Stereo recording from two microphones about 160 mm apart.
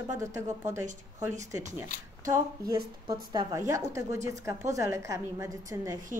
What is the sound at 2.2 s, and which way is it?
A woman's voice, 20° right (ahead or behind).